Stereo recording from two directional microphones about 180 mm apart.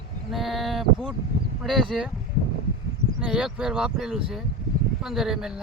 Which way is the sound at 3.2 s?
5° right (ahead or behind).